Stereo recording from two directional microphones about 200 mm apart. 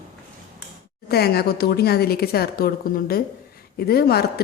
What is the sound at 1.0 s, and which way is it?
Speech, 50° left (ahead or behind).